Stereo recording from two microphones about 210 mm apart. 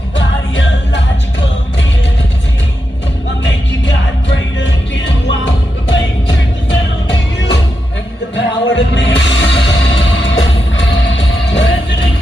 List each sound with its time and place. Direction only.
0.2 s music: 60° left (ahead or behind)
4.6 s music: 60° left (ahead or behind)
8.4 s music: 60° left (ahead or behind)